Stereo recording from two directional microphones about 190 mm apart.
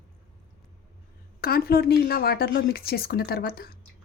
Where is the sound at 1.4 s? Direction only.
55° left (ahead or behind).